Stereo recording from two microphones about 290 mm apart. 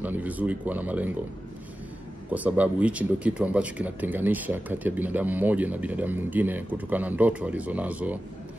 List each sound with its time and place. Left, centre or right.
0.0 s speech: centre
2.3 s speech: centre